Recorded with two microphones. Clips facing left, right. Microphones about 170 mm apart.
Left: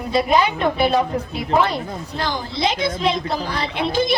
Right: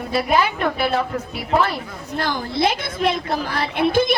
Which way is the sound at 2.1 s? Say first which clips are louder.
Right 3 dB; 55° right (ahead or behind).